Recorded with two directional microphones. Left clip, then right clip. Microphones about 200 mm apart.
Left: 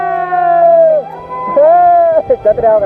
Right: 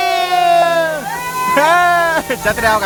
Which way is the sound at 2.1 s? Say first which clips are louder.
Left 6 dB; 30° right (ahead or behind).